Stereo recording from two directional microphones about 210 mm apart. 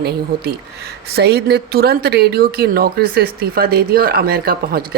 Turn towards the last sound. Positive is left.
turn(degrees=-45)  # may be behind; listen again after turning